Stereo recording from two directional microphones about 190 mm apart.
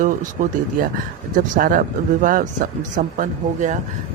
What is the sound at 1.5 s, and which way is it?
Speech, 45° right (ahead or behind).